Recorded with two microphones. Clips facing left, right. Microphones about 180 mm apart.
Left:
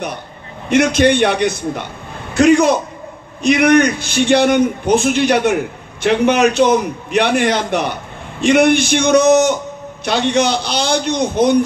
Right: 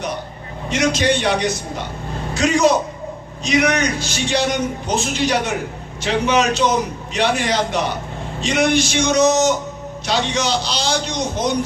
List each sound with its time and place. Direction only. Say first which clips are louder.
0.7 s a man's voice: left 6 dB; 55° left (ahead or behind)